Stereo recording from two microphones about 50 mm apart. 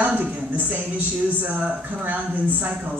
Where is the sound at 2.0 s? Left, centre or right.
Right.